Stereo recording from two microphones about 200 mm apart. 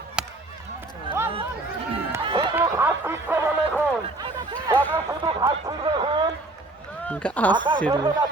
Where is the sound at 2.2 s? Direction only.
25° right (ahead or behind).